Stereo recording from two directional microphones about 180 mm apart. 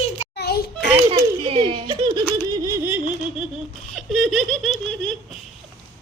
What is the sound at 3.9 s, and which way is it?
Giggle, centre (ahead or behind).